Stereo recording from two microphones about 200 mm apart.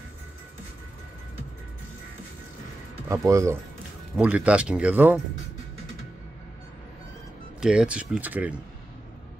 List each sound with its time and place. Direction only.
3.1 s speech: 15° right (ahead or behind)
7.6 s speech: 5° right (ahead or behind)